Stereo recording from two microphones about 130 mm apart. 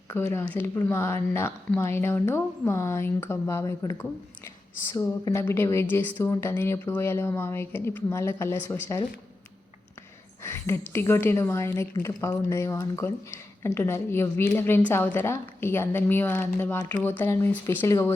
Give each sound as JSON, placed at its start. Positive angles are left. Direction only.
{"t": 0.1, "sound": "a woman's voice", "side_deg": 15}
{"t": 5.2, "sound": "a woman's voice", "side_deg": 20}
{"t": 10.4, "sound": "a woman's voice", "side_deg": 20}